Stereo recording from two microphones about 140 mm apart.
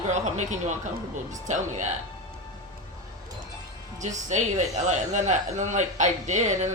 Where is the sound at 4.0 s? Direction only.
60° right (ahead or behind).